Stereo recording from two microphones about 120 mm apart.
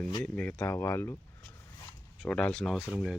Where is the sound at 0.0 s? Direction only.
30° left (ahead or behind).